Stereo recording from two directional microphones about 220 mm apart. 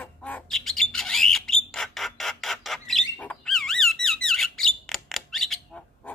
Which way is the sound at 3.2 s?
5° left (ahead or behind).